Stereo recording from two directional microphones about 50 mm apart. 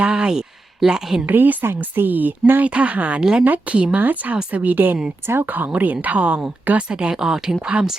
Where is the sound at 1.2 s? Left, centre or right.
Right.